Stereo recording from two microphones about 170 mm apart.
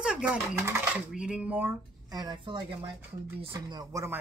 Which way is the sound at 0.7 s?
5° right (ahead or behind).